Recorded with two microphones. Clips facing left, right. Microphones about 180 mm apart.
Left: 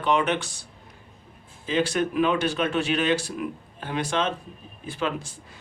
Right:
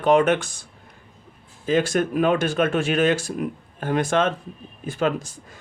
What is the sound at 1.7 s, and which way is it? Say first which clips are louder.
Speech: right 4 dB; 45° right (ahead or behind).